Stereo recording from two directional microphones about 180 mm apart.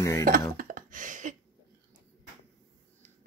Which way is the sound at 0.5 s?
50° right (ahead or behind).